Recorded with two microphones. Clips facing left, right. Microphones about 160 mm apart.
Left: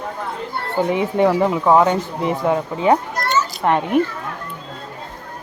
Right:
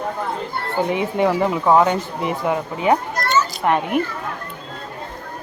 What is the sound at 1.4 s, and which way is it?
Speech, 15° left (ahead or behind).